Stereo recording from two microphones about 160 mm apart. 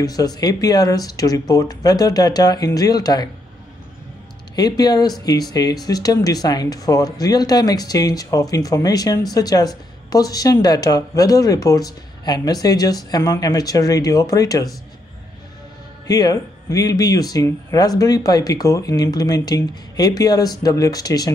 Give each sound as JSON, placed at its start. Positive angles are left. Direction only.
{"t": 0.0, "sound": "speech", "side_deg": 25}
{"t": 4.6, "sound": "speech", "side_deg": 25}
{"t": 16.1, "sound": "speech", "side_deg": 25}